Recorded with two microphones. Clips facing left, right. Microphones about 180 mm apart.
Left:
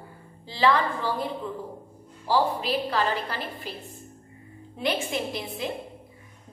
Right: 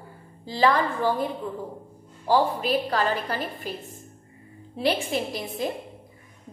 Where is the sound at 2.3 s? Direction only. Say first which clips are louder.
Right 2 dB; 45° right (ahead or behind).